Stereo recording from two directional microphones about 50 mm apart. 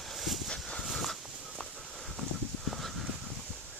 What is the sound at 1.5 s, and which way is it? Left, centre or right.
Walk, centre.